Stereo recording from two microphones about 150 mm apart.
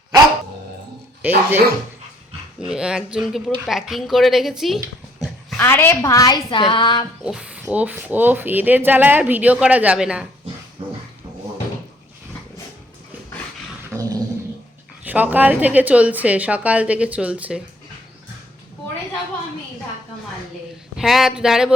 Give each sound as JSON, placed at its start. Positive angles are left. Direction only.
{"t": 1.2, "sound": "speech", "side_deg": -15}
{"t": 2.6, "sound": "a woman's voice", "side_deg": -5}
{"t": 5.5, "sound": "a woman's voice", "side_deg": 15}
{"t": 7.3, "sound": "speech", "side_deg": -5}
{"t": 10.8, "sound": "music", "side_deg": -40}
{"t": 13.9, "sound": "a sound", "side_deg": -20}
{"t": 15.0, "sound": "speech", "side_deg": -10}
{"t": 20.9, "sound": "a woman's voice", "side_deg": 0}